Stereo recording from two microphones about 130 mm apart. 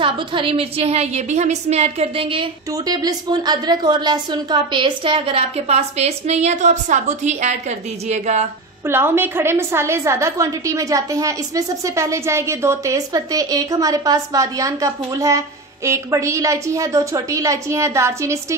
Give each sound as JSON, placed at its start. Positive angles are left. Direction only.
{"t": 0.0, "sound": "a woman's voice", "side_deg": -40}
{"t": 2.7, "sound": "a woman's voice", "side_deg": -30}
{"t": 8.8, "sound": "a woman's voice", "side_deg": -15}